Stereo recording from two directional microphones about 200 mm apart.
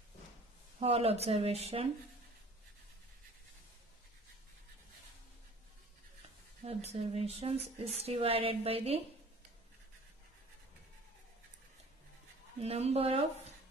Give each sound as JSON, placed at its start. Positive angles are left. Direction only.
{"t": 0.7, "sound": "speech", "side_deg": -30}
{"t": 6.6, "sound": "speech", "side_deg": -30}
{"t": 12.5, "sound": "speech", "side_deg": -30}